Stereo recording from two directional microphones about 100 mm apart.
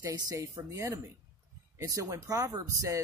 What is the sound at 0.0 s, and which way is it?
Speech, 35° right (ahead or behind).